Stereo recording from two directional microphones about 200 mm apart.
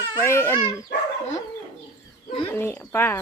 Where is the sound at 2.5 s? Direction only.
10° left (ahead or behind).